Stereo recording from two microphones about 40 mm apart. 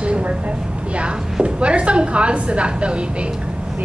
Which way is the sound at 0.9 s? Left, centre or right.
Right.